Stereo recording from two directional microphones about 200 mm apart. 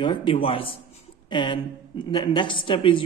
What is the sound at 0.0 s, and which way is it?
Speech, 25° left (ahead or behind).